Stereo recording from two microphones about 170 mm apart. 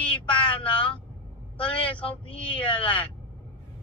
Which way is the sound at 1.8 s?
30° left (ahead or behind).